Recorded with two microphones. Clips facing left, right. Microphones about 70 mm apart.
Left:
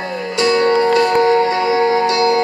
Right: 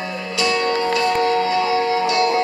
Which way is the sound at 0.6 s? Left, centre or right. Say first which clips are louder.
Left 7 dB; left.